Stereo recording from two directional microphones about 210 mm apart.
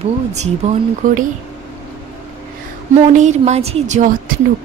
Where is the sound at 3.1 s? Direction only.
35° right (ahead or behind).